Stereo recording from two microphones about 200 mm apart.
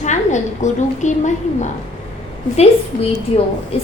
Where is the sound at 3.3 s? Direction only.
30° left (ahead or behind).